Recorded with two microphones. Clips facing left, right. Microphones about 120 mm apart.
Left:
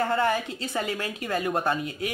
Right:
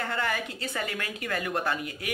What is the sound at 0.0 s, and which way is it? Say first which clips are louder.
Speech: left 6 dB; 30° left (ahead or behind).